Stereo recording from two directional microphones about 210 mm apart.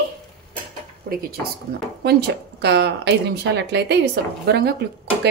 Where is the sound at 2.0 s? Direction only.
50° right (ahead or behind).